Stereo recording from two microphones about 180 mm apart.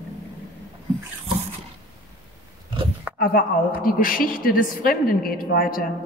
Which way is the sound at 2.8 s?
30° right (ahead or behind).